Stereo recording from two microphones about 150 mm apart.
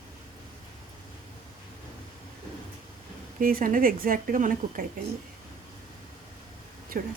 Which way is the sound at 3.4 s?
70° right (ahead or behind).